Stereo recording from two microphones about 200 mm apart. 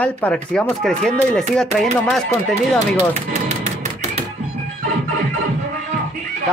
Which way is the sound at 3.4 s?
35° right (ahead or behind).